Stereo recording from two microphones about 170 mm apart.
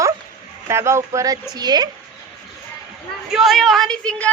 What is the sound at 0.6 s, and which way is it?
A man's voice, 15° right (ahead or behind).